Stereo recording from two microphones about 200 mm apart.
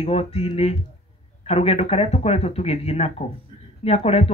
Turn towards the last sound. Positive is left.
turn(degrees=30)  # may be behind; listen again after turning